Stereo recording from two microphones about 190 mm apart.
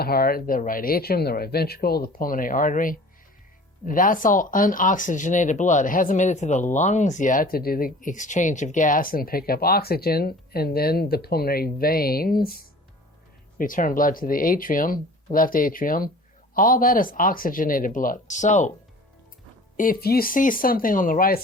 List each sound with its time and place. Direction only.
0.0 s speech: 50° left (ahead or behind)
13.6 s speech: 45° left (ahead or behind)
19.7 s speech: 45° left (ahead or behind)